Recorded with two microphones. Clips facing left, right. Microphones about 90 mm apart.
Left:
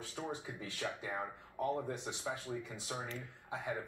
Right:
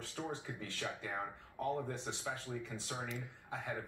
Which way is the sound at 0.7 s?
15° left (ahead or behind).